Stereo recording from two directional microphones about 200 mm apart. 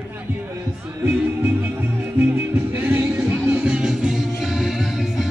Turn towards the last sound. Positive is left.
turn(degrees=0)  # may be behind; listen again after turning